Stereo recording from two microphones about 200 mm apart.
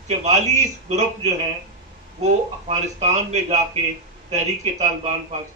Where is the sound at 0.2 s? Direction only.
35° right (ahead or behind).